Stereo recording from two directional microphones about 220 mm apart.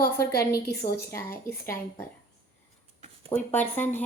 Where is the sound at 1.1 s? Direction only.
10° left (ahead or behind).